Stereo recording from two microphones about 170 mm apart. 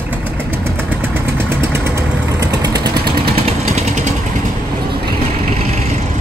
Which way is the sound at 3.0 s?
65° right (ahead or behind).